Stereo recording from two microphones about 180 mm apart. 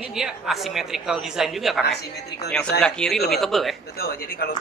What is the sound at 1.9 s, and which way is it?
Speech, 65° left (ahead or behind).